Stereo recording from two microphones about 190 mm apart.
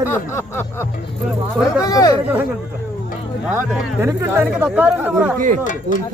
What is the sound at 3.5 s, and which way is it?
Speech, 15° right (ahead or behind).